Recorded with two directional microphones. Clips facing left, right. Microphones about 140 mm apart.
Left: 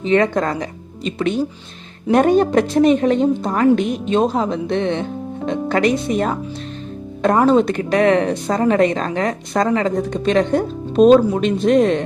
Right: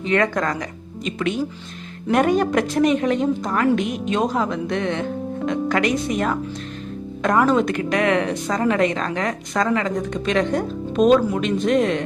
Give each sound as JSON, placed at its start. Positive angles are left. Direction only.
{"t": 0.0, "sound": "a woman's voice", "side_deg": 25}